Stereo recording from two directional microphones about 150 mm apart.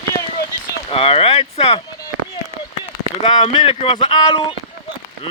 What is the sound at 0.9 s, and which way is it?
Speech, 40° left (ahead or behind).